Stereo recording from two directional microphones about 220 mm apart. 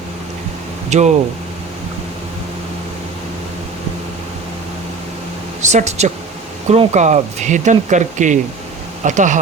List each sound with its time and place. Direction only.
0.9 s speech: 30° right (ahead or behind)
5.6 s speech: 30° right (ahead or behind)